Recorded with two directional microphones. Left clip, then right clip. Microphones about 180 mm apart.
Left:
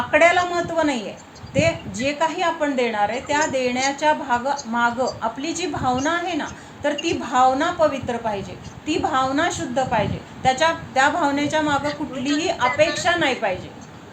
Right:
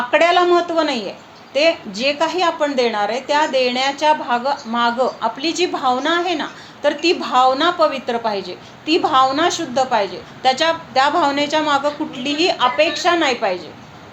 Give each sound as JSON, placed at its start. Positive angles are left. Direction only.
{"t": 0.1, "sound": "a woman's voice", "side_deg": -20}